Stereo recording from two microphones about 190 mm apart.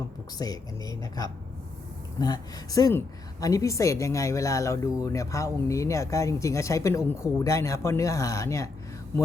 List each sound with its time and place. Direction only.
0.3 s speech: 20° left (ahead or behind)